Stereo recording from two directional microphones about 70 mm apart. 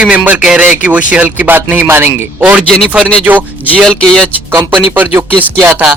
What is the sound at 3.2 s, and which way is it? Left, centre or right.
Speech, right.